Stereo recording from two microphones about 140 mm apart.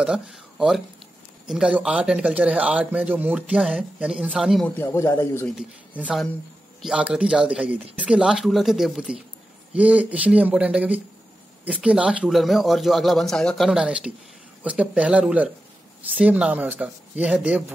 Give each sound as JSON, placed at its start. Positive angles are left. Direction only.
{"t": 0.0, "sound": "a man's voice", "side_deg": -5}
{"t": 4.6, "sound": "speech", "side_deg": 15}
{"t": 5.6, "sound": "a man's voice", "side_deg": -5}